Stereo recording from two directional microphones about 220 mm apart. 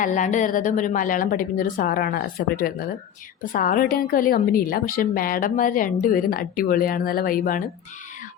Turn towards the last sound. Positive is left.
turn(degrees=40)  # may be behind; listen again after turning